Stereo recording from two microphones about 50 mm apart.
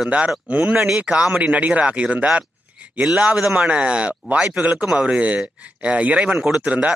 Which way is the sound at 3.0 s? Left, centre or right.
Centre.